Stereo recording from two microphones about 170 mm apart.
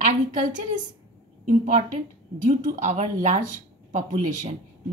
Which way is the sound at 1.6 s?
50° right (ahead or behind).